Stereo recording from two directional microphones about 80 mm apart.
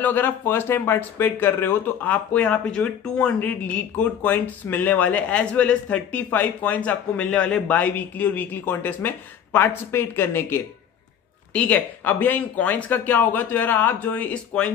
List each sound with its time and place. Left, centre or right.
0.0 s speech: left
11.5 s speech: centre